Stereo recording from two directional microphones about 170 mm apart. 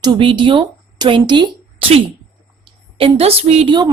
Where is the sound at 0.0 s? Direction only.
25° right (ahead or behind).